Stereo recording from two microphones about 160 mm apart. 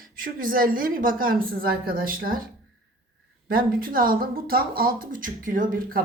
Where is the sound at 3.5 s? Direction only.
65° right (ahead or behind).